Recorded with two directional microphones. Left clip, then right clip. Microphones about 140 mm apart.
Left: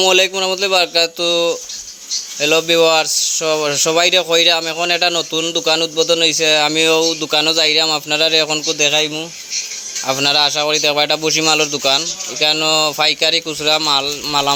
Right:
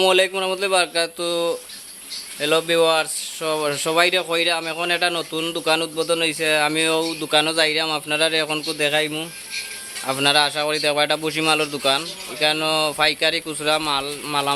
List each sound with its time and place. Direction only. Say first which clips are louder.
0.0 s speech: left 4 dB; 25° left (ahead or behind)